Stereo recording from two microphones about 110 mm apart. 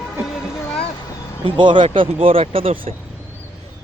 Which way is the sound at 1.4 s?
45° right (ahead or behind).